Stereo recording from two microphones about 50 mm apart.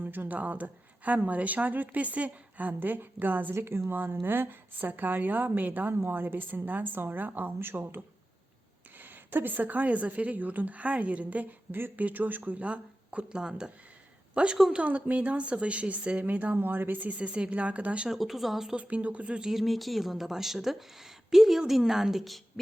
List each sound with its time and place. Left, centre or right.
0.0 s a woman's voice: right
3.5 s a woman's voice: right; by 14.6 s centre
14.7 s speech: right
18.1 s a woman's voice: centre
18.8 s speech: right
19.4 s a woman's voice: centre